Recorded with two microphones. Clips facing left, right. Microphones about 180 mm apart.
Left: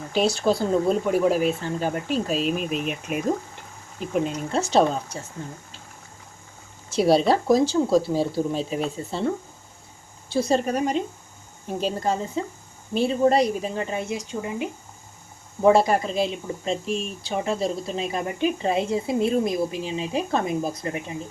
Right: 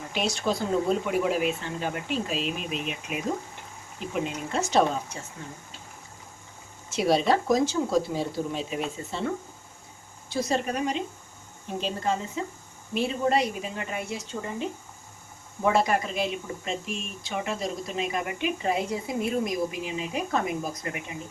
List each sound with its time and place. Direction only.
0.1 s speech: 35° left (ahead or behind)
4.3 s speech: 30° left (ahead or behind)
6.9 s speech: 35° left (ahead or behind)
10.2 s speech: 30° left (ahead or behind)
14.1 s speech: 15° left (ahead or behind)
15.6 s speech: 30° left (ahead or behind)